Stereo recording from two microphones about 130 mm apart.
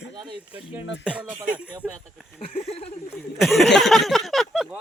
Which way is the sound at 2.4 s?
50° left (ahead or behind).